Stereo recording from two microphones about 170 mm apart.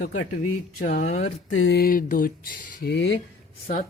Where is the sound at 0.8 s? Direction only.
60° left (ahead or behind).